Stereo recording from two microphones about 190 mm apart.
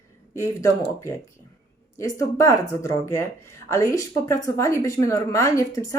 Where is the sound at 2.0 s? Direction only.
15° left (ahead or behind).